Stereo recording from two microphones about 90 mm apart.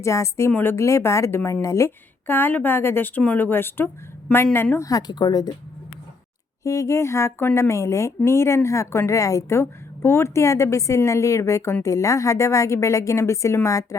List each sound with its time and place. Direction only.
0.0 s a woman's voice: 35° left (ahead or behind)
2.2 s speech: 20° left (ahead or behind)
4.8 s speech: 40° left (ahead or behind)
6.7 s a woman's voice: 35° left (ahead or behind)